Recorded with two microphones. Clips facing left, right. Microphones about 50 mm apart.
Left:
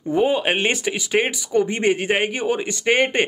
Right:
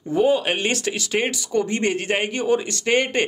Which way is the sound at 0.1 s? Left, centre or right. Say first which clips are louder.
Even; centre.